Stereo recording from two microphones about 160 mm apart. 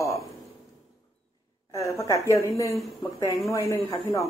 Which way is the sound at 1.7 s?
20° left (ahead or behind).